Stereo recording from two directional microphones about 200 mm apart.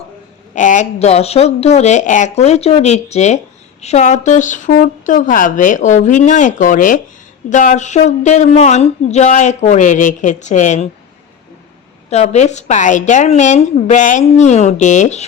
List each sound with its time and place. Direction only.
0.5 s speech: 40° left (ahead or behind)
12.1 s speech: 35° left (ahead or behind)